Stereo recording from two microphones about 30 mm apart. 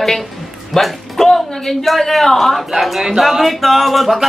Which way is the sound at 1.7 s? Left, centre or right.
Centre.